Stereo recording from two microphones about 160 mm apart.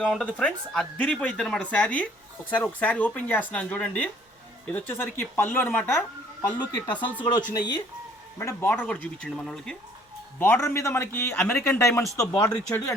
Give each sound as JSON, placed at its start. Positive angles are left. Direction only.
{"t": 0.0, "sound": "a man's voice", "side_deg": 5}
{"t": 6.4, "sound": "speech", "side_deg": 25}
{"t": 8.4, "sound": "a man's voice", "side_deg": 15}